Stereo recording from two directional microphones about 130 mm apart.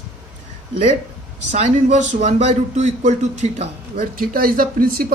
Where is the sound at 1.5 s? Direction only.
60° right (ahead or behind).